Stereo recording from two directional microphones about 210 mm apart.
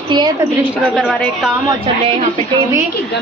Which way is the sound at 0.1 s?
20° right (ahead or behind).